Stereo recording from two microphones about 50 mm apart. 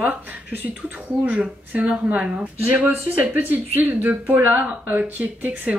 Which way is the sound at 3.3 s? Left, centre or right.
Right.